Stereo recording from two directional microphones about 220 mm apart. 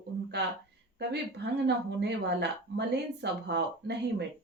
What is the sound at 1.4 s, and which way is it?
A woman's voice, 50° right (ahead or behind).